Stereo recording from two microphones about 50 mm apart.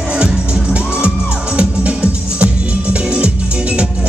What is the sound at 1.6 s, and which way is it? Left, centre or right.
Music, right.